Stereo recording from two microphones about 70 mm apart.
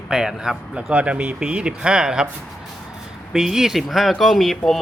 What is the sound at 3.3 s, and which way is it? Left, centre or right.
A man's voice, centre.